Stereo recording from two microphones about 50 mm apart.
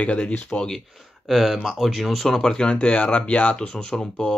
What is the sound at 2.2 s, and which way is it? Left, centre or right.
Speech, centre.